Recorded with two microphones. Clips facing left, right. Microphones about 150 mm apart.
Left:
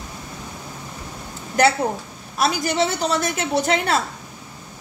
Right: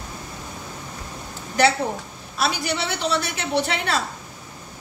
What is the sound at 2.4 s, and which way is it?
A woman's voice, 45° left (ahead or behind).